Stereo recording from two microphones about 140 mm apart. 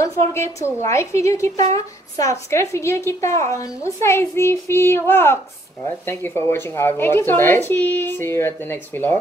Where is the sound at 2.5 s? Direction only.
20° left (ahead or behind).